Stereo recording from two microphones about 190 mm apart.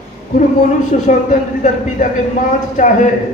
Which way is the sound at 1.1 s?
40° left (ahead or behind).